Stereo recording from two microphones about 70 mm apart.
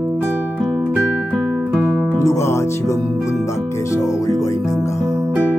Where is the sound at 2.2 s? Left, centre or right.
Left.